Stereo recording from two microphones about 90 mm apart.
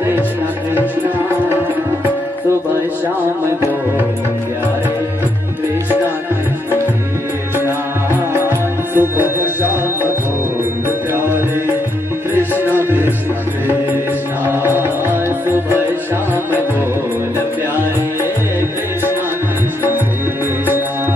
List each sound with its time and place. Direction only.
8.3 s music: 20° right (ahead or behind)
12.4 s music: 20° right (ahead or behind)
14.4 s music: 25° right (ahead or behind)